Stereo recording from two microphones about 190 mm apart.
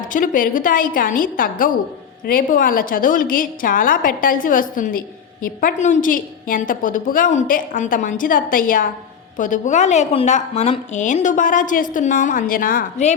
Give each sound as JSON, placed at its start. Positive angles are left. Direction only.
{"t": 0.1, "sound": "a woman's voice", "side_deg": 45}